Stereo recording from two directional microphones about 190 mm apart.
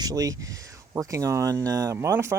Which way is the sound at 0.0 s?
20° right (ahead or behind).